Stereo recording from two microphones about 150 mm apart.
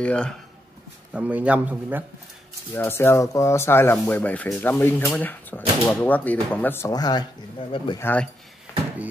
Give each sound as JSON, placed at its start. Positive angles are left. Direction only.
{"t": 0.0, "sound": "speech", "side_deg": 5}
{"t": 1.1, "sound": "a man's voice", "side_deg": -10}
{"t": 2.7, "sound": "speech", "side_deg": 15}
{"t": 6.9, "sound": "speech", "side_deg": 25}
{"t": 8.0, "sound": "speech", "side_deg": 10}
{"t": 8.7, "sound": "a sound", "side_deg": 15}